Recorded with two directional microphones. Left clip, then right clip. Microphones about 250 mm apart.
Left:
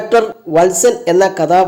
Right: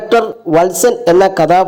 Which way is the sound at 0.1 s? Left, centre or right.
Right.